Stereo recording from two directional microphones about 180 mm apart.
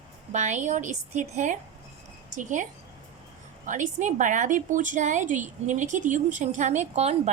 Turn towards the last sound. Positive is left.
turn(degrees=-40)  # may be behind; listen again after turning